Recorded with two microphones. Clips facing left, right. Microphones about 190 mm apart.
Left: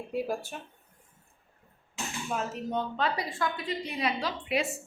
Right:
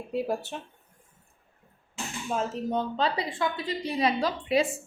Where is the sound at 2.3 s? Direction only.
30° right (ahead or behind).